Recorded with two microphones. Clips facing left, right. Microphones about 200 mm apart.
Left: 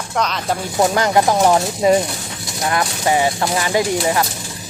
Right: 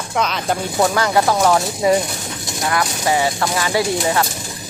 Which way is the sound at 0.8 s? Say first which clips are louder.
Left 2 dB; 20° left (ahead or behind).